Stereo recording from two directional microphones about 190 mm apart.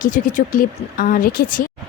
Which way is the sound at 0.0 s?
40° left (ahead or behind).